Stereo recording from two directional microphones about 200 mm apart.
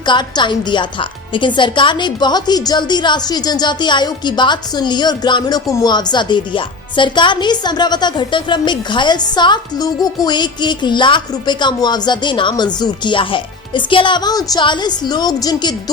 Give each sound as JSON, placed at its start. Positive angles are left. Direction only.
{"t": 0.0, "sound": "a woman's voice", "side_deg": 20}